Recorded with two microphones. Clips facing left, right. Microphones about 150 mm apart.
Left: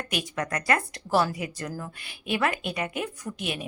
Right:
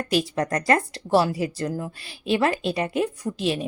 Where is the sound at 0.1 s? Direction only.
35° right (ahead or behind).